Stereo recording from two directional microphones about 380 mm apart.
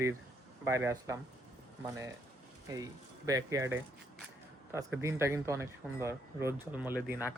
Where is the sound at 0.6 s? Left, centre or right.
Centre.